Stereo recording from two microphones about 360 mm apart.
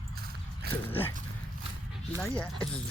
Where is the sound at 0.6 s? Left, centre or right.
Right.